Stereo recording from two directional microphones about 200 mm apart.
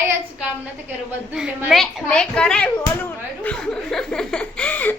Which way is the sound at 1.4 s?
5° right (ahead or behind).